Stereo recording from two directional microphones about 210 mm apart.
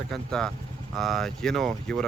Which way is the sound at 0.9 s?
Centre (ahead or behind).